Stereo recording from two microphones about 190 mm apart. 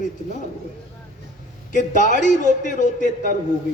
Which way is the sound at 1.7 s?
40° left (ahead or behind).